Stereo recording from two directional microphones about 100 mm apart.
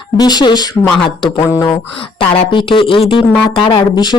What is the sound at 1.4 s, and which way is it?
Speech, 35° left (ahead or behind).